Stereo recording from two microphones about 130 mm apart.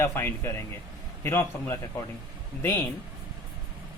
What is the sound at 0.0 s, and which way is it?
Speech, 20° left (ahead or behind).